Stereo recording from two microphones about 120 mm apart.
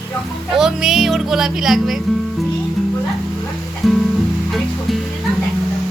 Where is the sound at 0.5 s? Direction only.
Centre (ahead or behind).